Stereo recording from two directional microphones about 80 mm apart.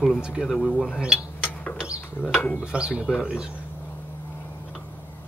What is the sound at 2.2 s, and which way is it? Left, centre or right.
Speech, centre.